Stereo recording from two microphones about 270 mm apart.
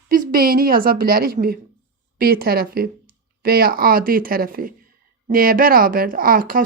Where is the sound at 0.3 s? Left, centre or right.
Right.